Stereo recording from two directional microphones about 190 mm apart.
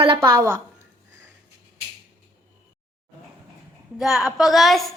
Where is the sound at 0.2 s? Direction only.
15° right (ahead or behind).